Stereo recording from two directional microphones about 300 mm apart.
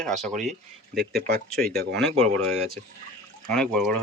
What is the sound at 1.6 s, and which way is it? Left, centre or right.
Speech, right.